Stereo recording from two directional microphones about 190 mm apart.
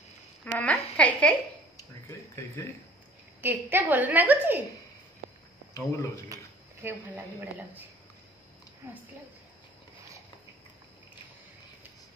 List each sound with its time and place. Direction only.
0.6 s a woman's voice: 5° left (ahead or behind)
2.0 s a sound: 15° left (ahead or behind)
3.3 s a woman's voice: 10° right (ahead or behind)
5.8 s speech: 15° left (ahead or behind)
6.2 s speech: 15° right (ahead or behind)